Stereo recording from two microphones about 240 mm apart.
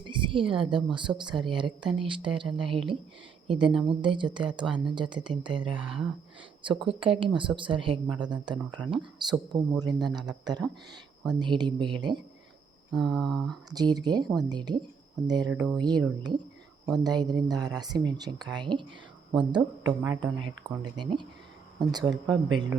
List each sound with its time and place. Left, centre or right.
0.0 s a sound: centre
0.9 s a woman's voice: centre
5.9 s speech: centre
6.6 s a woman's voice: right
12.9 s speech: centre
13.7 s a woman's voice: centre
15.5 s speech: centre
15.8 s a woman's voice: centre